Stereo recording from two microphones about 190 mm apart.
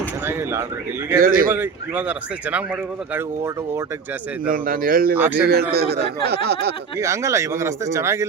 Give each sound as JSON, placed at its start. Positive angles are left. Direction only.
{"t": 0.3, "sound": "speech", "side_deg": -15}
{"t": 1.2, "sound": "speech", "side_deg": -50}
{"t": 1.5, "sound": "speech", "side_deg": -10}
{"t": 4.4, "sound": "speech", "side_deg": -50}
{"t": 5.1, "sound": "speech", "side_deg": -10}
{"t": 5.4, "sound": "speech", "side_deg": -55}
{"t": 7.0, "sound": "speech", "side_deg": -15}